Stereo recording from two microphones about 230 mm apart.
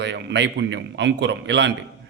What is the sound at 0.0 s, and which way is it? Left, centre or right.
A man's voice, right.